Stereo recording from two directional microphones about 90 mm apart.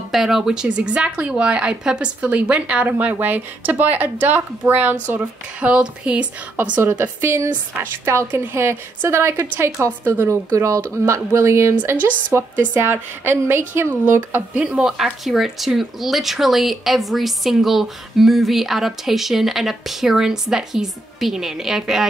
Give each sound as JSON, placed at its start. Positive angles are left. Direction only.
{"t": 0.1, "sound": "speech", "side_deg": -5}
{"t": 6.8, "sound": "a woman's voice", "side_deg": -30}
{"t": 14.5, "sound": "speech", "side_deg": -15}